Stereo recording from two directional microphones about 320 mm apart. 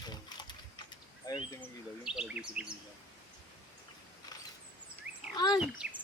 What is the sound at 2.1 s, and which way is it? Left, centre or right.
Speech, centre.